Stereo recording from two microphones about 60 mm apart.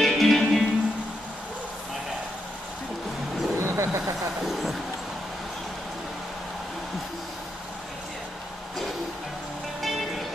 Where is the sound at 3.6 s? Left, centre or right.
Right.